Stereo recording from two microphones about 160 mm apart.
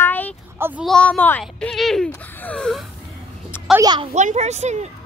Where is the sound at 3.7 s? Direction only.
25° right (ahead or behind).